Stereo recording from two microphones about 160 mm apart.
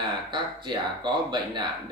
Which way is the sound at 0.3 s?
30° right (ahead or behind).